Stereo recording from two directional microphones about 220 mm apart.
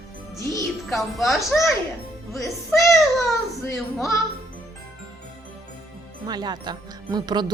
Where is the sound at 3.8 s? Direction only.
Centre (ahead or behind).